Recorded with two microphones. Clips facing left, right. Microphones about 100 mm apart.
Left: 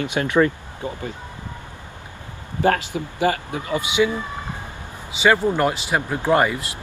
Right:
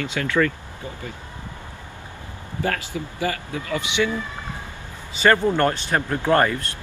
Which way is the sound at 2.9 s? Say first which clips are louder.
Left 5 dB; 20° left (ahead or behind).